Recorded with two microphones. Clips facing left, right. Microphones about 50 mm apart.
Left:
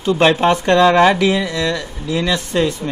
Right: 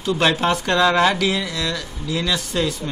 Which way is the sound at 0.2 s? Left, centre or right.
Left.